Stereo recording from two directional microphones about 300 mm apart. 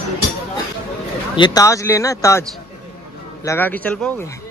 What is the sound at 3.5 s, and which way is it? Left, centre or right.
Speech, centre.